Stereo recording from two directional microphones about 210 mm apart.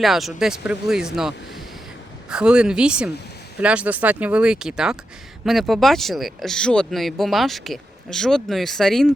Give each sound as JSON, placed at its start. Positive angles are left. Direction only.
{"t": 0.0, "sound": "speech", "side_deg": 0}
{"t": 2.3, "sound": "speech", "side_deg": -5}